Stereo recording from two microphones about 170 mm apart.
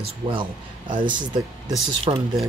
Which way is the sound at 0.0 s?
30° right (ahead or behind).